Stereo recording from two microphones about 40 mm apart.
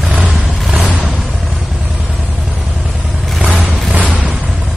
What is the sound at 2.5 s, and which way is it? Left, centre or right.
Vehicle, right.